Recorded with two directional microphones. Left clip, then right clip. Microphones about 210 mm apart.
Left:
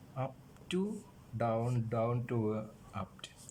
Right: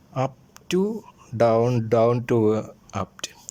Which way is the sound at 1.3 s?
50° right (ahead or behind).